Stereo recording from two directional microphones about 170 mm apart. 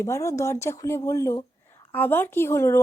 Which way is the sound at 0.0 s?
15° left (ahead or behind).